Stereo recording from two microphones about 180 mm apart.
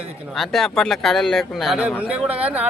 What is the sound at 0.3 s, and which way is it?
Speech, centre (ahead or behind).